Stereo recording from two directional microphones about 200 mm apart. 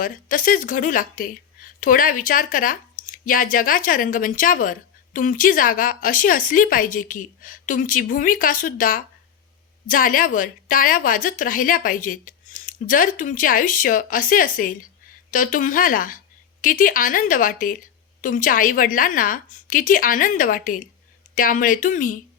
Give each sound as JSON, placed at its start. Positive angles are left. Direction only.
{"t": 0.0, "sound": "speech", "side_deg": 45}